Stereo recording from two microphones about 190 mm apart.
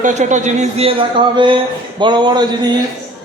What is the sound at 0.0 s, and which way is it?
A man's voice, 40° right (ahead or behind).